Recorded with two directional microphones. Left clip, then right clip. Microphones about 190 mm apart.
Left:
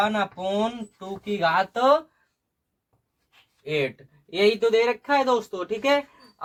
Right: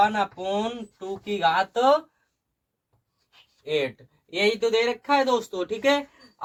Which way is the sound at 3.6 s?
30° left (ahead or behind).